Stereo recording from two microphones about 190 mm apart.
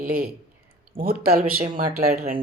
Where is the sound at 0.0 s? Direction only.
50° right (ahead or behind).